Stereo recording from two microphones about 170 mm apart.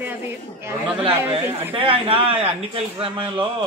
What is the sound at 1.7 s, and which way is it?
A man's voice, 30° right (ahead or behind).